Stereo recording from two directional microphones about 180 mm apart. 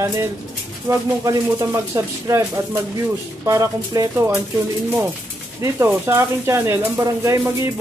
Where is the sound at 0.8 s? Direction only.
15° right (ahead or behind).